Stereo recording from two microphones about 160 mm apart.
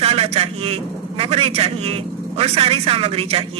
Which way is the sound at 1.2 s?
40° right (ahead or behind).